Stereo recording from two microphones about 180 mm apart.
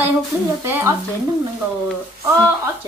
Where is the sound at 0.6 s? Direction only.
15° right (ahead or behind).